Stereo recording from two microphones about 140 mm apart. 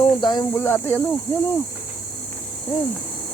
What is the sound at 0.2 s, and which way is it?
Speech, 30° left (ahead or behind).